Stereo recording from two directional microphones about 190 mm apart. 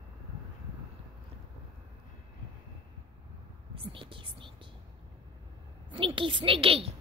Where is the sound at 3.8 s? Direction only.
25° right (ahead or behind).